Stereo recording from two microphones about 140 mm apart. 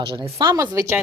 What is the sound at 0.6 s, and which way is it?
Speech, 20° right (ahead or behind).